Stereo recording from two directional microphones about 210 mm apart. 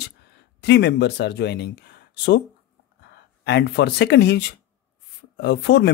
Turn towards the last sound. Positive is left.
turn(degrees=55)  # may be behind; listen again after turning